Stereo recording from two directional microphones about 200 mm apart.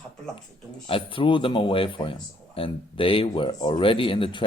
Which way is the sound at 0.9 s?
25° left (ahead or behind).